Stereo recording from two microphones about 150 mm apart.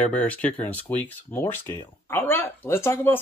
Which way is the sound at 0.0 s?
10° left (ahead or behind).